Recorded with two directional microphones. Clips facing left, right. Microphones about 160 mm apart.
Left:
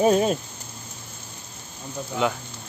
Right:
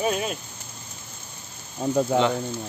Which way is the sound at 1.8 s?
90° right.